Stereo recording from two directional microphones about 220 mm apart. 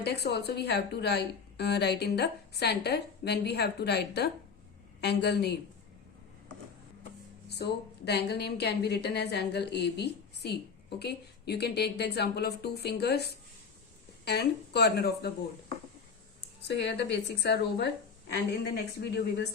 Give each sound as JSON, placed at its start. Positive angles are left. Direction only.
{"t": 0.0, "sound": "a woman's voice", "side_deg": 50}
{"t": 7.5, "sound": "a woman's voice", "side_deg": 50}
{"t": 14.3, "sound": "a woman's voice", "side_deg": 50}
{"t": 16.6, "sound": "a woman's voice", "side_deg": 50}